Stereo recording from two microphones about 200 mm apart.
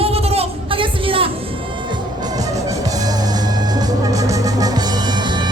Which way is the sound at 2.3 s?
20° right (ahead or behind).